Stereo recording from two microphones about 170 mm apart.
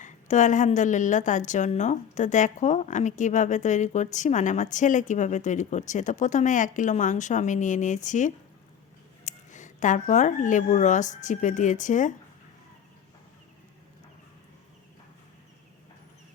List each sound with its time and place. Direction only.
0.0 s a woman's voice: 45° left (ahead or behind)